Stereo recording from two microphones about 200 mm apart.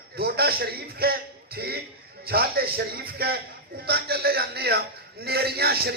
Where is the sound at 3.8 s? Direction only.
55° right (ahead or behind).